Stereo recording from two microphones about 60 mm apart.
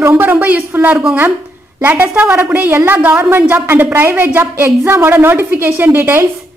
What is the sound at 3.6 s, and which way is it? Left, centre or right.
A woman's voice, right.